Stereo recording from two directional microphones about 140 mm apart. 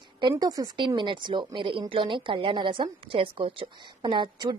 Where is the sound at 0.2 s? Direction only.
30° right (ahead or behind).